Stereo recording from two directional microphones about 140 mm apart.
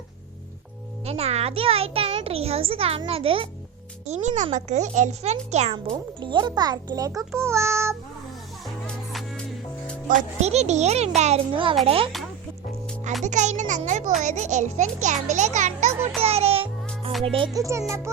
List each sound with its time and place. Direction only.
1.0 s a child's voice: 45° right (ahead or behind)
4.0 s a child's voice: 55° right (ahead or behind)
5.7 s a child's voice: 35° right (ahead or behind)
7.3 s child singing: 20° right (ahead or behind)
10.1 s a child's voice: 60° right (ahead or behind)
11.5 s a child's voice: 40° right (ahead or behind)
13.2 s a child's voice: 60° right (ahead or behind)
16.2 s music: 45° right (ahead or behind)
17.2 s a child's voice: 40° right (ahead or behind)
17.5 s a child's voice: 20° right (ahead or behind)